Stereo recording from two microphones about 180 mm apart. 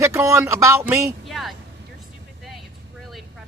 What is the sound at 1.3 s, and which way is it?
Speech, centre (ahead or behind).